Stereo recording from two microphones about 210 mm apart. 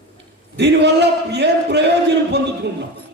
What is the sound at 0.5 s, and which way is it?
A man's voice, 55° right (ahead or behind).